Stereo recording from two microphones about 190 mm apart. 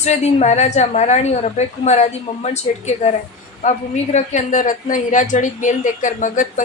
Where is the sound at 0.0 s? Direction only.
35° left (ahead or behind).